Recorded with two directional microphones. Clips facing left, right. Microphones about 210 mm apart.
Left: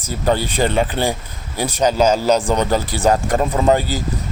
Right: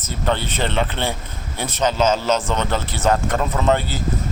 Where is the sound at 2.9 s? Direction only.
15° left (ahead or behind).